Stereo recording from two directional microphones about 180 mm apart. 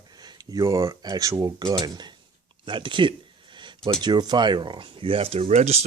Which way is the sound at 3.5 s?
25° right (ahead or behind).